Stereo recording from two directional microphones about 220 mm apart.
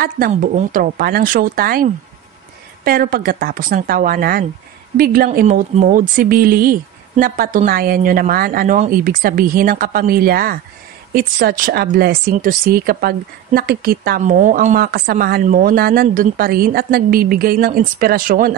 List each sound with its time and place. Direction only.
0.0 s speech: 40° right (ahead or behind)